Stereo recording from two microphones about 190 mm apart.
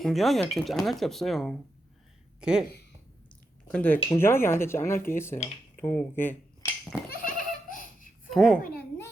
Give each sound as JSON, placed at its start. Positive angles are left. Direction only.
{"t": 0.0, "sound": "speech", "side_deg": 0}
{"t": 3.7, "sound": "speech", "side_deg": 10}
{"t": 7.1, "sound": "a sound", "side_deg": 45}
{"t": 8.3, "sound": "a child's voice", "side_deg": 0}